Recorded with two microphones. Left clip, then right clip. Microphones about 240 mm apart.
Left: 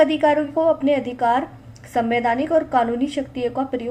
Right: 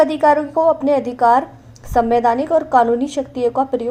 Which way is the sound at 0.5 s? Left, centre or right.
Right.